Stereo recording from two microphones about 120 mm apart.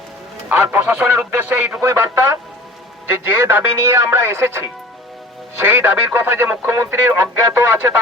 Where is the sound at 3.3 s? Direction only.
20° right (ahead or behind).